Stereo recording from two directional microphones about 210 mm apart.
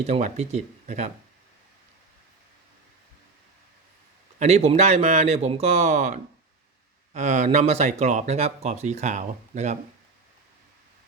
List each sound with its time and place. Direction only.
0.0 s speech: 35° right (ahead or behind)
4.4 s speech: 30° right (ahead or behind)